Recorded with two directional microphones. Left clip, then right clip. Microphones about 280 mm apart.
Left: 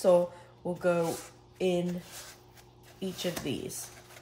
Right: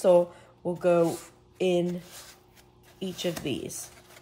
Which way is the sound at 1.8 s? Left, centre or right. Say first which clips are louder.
Right 5 dB; centre.